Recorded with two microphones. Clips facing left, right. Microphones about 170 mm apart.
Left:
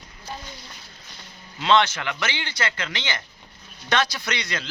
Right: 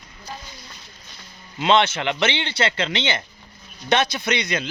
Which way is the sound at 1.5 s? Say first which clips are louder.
Right 2 dB; 20° right (ahead or behind).